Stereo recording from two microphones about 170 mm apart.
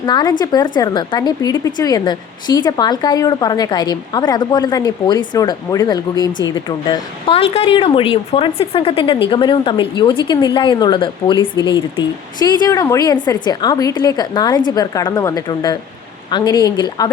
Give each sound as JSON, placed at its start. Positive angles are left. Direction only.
{"t": 0.0, "sound": "a woman's voice", "side_deg": 25}